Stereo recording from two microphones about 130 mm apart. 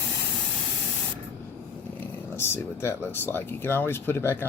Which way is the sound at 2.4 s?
20° left (ahead or behind).